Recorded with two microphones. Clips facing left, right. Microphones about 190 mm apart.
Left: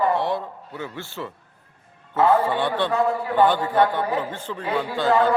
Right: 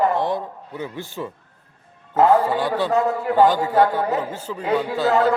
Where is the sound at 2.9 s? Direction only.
40° right (ahead or behind).